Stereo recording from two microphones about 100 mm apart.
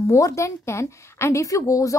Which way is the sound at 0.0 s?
30° left (ahead or behind).